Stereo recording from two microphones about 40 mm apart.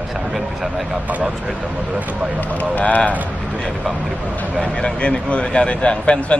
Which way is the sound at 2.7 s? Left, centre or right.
Left.